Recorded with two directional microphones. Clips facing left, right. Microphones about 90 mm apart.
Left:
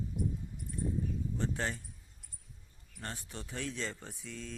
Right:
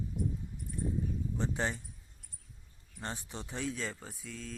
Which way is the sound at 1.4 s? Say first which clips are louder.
Right 2 dB; 20° right (ahead or behind).